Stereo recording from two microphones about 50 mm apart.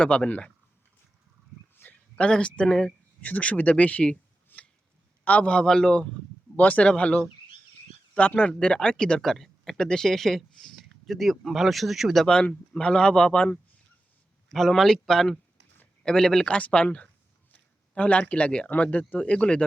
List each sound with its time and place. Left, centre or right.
0.0 s speech: left
1.7 s a sound: left
2.3 s speech: left
4.5 s a sound: left
5.2 s speech: left
6.6 s speech: left; by 12.1 s centre
12.1 s speech: centre
14.5 s speech: centre
16.6 s speech: left
17.5 s a sound: left
18.8 s speech: left